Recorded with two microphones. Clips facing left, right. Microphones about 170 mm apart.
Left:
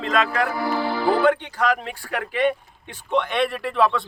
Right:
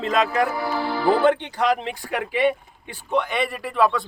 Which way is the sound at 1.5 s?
10° right (ahead or behind).